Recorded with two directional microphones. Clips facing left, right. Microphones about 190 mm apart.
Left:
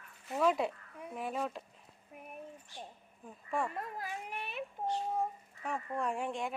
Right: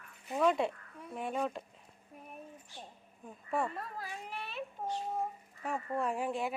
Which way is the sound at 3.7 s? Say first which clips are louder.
Left 2 dB; 15° left (ahead or behind).